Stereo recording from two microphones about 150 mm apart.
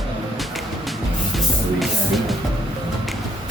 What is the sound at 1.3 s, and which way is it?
Music, centre (ahead or behind).